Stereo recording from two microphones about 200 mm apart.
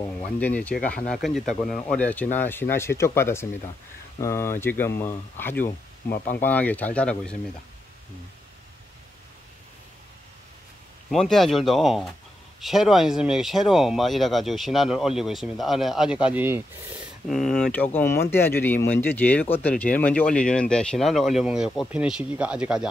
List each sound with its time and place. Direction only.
0.2 s speech: 5° left (ahead or behind)
6.0 s speech: 50° left (ahead or behind)
6.4 s speech: 10° left (ahead or behind)
11.1 s speech: centre (ahead or behind)
17.3 s speech: centre (ahead or behind)